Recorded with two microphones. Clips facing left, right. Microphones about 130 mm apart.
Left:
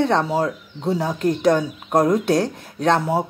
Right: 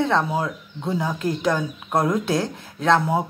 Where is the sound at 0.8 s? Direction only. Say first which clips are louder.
Left 3 dB; 35° left (ahead or behind).